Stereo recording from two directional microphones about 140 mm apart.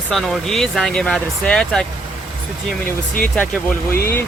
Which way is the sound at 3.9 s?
90° left.